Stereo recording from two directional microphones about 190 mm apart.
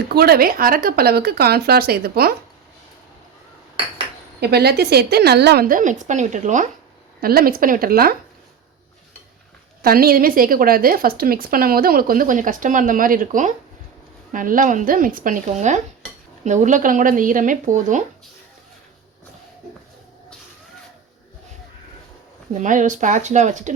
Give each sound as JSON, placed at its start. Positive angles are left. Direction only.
{"t": 0.1, "sound": "a woman's voice", "side_deg": -55}
{"t": 4.4, "sound": "a woman's voice", "side_deg": -55}
{"t": 7.2, "sound": "a woman's voice", "side_deg": -50}
{"t": 9.8, "sound": "a woman's voice", "side_deg": -50}
{"t": 22.5, "sound": "speech", "side_deg": -40}